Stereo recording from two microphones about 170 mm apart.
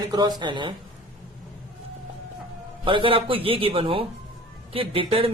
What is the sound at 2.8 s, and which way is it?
A man's voice, 30° right (ahead or behind).